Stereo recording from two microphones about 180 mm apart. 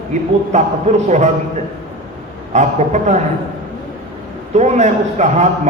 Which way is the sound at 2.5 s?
40° right (ahead or behind).